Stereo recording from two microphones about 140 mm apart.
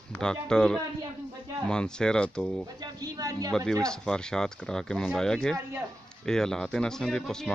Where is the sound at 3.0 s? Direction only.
25° right (ahead or behind).